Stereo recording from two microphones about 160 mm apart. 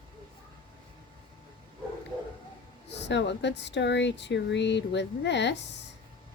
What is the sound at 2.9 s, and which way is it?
Speech, 90° left.